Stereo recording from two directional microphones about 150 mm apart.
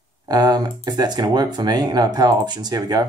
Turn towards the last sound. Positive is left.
turn(degrees=-25)  # may be behind; listen again after turning